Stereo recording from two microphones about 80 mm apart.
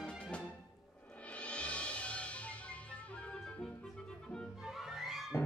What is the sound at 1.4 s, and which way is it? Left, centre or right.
Music, centre.